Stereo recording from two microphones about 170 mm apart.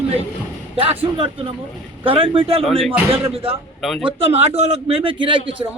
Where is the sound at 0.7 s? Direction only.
35° right (ahead or behind).